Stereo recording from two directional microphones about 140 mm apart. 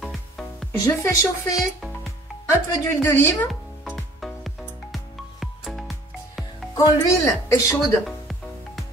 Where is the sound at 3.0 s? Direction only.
20° left (ahead or behind).